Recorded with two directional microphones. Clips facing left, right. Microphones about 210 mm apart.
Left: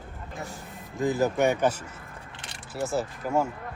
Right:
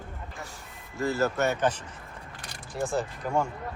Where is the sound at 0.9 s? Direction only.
15° left (ahead or behind).